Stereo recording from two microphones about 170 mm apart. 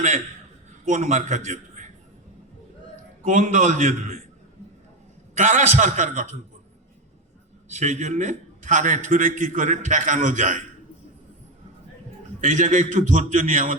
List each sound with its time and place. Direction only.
0.9 s a man's voice: 45° right (ahead or behind)
3.2 s a man's voice: 50° right (ahead or behind)
5.4 s a man's voice: 45° right (ahead or behind)
7.7 s a man's voice: 45° right (ahead or behind)
12.4 s a man's voice: 45° right (ahead or behind)